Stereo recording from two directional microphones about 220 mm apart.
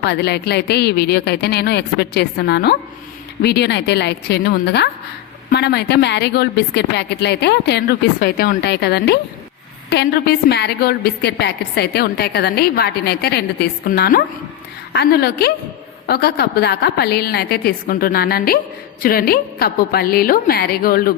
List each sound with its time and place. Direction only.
0.0 s a woman's voice: 50° left (ahead or behind)